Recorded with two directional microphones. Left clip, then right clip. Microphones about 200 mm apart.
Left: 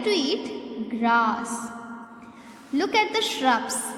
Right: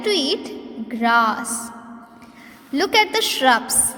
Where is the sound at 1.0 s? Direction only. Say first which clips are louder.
Right 5 dB; 25° right (ahead or behind).